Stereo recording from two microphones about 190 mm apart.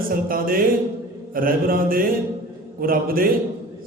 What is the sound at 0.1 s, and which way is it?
A man's voice, 50° right (ahead or behind).